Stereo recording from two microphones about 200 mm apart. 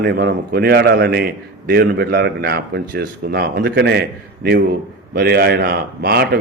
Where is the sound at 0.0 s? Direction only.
55° right (ahead or behind).